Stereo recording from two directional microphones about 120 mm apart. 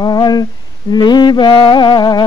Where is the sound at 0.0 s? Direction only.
35° left (ahead or behind).